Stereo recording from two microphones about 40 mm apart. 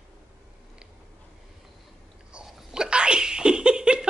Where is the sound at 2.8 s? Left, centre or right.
Right.